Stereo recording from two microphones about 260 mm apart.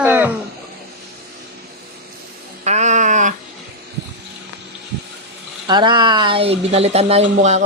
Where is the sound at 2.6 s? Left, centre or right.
Right.